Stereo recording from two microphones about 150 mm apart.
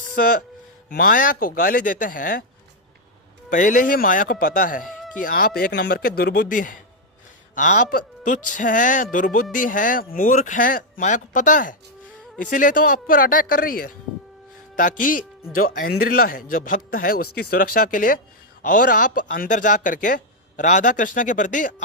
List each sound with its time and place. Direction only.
0.9 s speech: 65° left (ahead or behind)
3.5 s speech: 60° left (ahead or behind)
10.2 s speech: 60° left (ahead or behind)
14.8 s speech: 60° left (ahead or behind)
15.5 s speech: 75° left (ahead or behind); by 21.8 s 60° left (ahead or behind)